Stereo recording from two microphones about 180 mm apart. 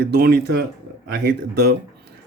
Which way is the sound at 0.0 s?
60° right (ahead or behind).